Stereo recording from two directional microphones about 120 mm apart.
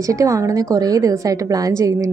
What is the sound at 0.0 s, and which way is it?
A woman's voice, 25° right (ahead or behind).